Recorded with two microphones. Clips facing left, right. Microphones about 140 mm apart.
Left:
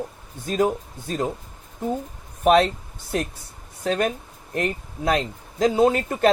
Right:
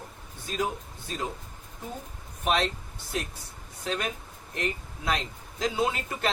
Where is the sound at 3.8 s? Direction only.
50° left (ahead or behind).